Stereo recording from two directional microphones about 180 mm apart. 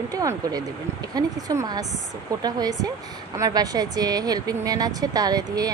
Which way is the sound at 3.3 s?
20° right (ahead or behind).